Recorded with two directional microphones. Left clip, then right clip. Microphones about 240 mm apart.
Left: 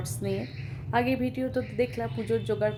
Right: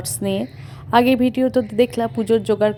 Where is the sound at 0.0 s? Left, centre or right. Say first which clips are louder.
Right 9 dB; right.